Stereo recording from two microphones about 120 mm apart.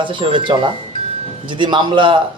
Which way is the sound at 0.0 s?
45° right (ahead or behind).